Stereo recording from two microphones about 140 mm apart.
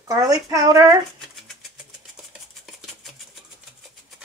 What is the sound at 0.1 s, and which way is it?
Speech, 25° right (ahead or behind).